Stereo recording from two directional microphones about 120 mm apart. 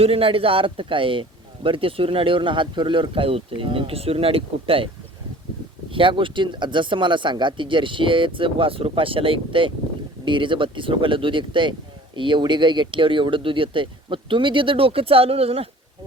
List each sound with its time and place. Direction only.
0.0 s speech: 50° right (ahead or behind)
5.9 s speech: 45° right (ahead or behind)